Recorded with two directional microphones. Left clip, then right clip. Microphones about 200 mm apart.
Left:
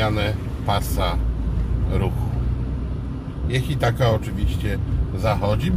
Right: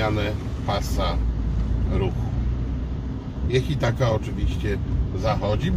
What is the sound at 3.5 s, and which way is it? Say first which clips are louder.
Speech: left 1 dB; 20° left (ahead or behind).